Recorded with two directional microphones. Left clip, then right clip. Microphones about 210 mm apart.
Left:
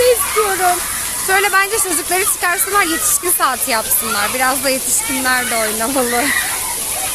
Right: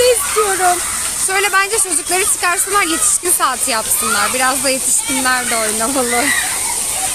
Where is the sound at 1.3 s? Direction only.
10° right (ahead or behind).